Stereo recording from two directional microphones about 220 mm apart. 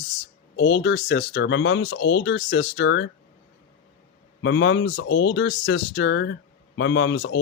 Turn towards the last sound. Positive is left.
turn(degrees=55)  # may be behind; listen again after turning